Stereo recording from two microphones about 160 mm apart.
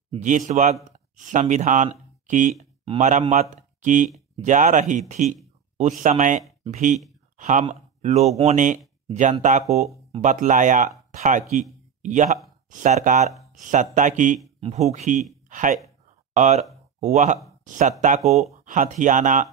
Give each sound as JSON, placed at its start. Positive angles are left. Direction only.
{"t": 0.1, "sound": "speech", "side_deg": -50}